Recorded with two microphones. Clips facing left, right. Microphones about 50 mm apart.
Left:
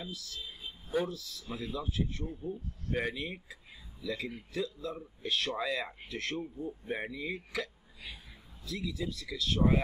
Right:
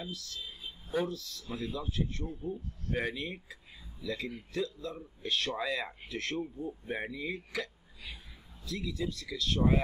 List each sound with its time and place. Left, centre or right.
0.0 s speech: centre